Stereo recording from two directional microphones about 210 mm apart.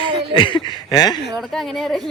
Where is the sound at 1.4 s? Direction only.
Centre (ahead or behind).